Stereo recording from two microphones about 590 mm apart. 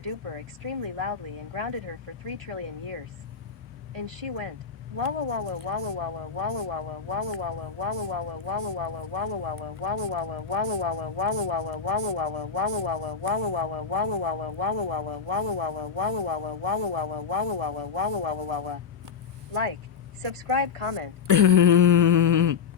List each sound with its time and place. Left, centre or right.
0.0 s speech: right
2.5 s speech: right
4.9 s speech: right
20.2 s speech: right
21.2 s a sound: right